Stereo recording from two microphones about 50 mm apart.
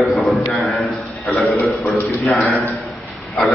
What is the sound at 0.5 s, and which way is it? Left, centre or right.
Speech, left.